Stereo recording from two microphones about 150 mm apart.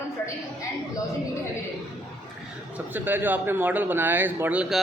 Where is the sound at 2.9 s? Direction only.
15° right (ahead or behind).